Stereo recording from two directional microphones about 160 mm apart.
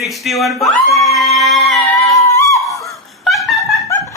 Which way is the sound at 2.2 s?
20° left (ahead or behind).